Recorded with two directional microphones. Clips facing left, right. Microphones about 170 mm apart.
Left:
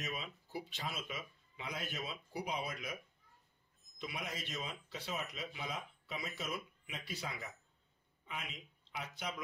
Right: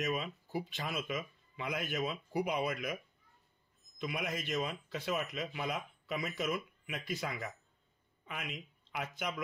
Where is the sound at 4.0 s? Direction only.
55° right (ahead or behind).